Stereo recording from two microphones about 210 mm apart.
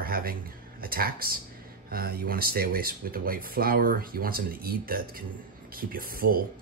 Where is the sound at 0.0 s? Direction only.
45° right (ahead or behind).